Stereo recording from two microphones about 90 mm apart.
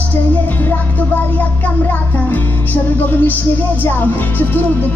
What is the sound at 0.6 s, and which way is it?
Music, 20° left (ahead or behind).